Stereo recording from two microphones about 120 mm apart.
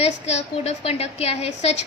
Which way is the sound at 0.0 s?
65° left (ahead or behind).